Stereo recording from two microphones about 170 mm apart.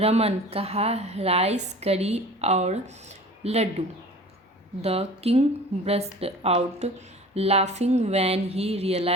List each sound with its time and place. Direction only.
0.0 s a woman's voice: 35° right (ahead or behind)